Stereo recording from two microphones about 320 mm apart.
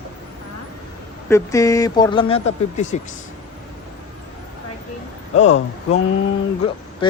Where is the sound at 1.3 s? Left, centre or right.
Centre.